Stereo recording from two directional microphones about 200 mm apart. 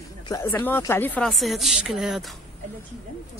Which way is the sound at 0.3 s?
15° left (ahead or behind).